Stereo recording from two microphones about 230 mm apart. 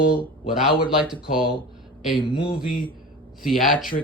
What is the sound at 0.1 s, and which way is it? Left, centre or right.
Speech, centre.